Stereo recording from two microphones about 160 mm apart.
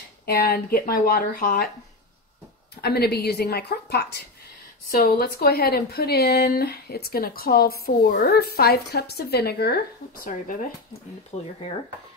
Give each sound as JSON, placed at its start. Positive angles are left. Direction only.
{"t": 0.3, "sound": "speech", "side_deg": 70}
{"t": 2.8, "sound": "speech", "side_deg": 85}
{"t": 10.2, "sound": "speech", "side_deg": 55}
{"t": 11.3, "sound": "speech", "side_deg": 35}